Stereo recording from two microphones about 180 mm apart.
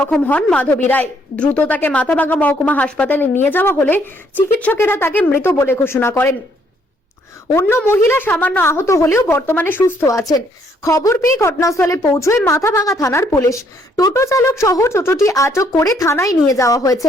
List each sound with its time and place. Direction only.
0.0 s a woman's voice: 5° left (ahead or behind)
7.4 s a woman's voice: 15° left (ahead or behind)